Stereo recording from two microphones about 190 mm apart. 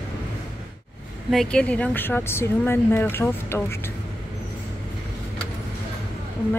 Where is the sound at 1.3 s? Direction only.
5° left (ahead or behind).